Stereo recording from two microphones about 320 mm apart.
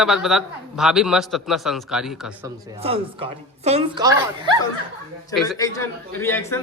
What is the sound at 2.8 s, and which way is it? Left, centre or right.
Speech, centre.